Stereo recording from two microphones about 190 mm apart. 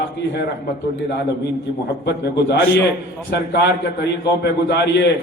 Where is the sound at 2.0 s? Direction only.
65° left (ahead or behind).